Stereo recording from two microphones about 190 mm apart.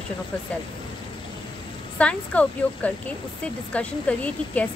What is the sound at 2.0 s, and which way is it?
Speech, 5° left (ahead or behind).